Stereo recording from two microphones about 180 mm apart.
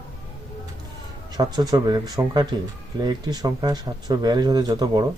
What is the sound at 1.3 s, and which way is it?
Speech, 25° right (ahead or behind).